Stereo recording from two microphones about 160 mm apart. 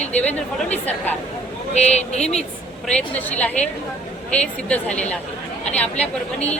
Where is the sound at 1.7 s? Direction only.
45° left (ahead or behind).